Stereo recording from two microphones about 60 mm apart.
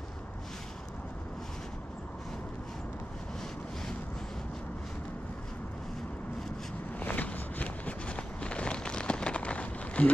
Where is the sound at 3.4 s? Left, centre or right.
Centre.